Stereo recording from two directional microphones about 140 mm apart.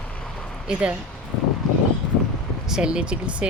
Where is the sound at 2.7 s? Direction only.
5° right (ahead or behind).